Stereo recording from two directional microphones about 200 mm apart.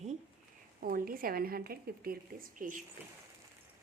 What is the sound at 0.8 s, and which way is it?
Speech, 45° right (ahead or behind).